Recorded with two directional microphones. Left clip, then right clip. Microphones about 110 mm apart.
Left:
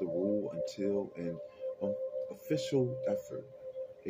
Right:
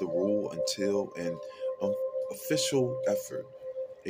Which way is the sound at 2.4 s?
5° left (ahead or behind).